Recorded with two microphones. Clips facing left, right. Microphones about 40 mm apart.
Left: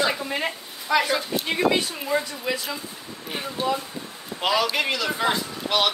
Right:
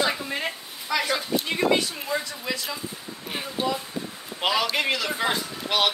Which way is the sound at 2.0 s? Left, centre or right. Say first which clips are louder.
Left 3 dB; centre.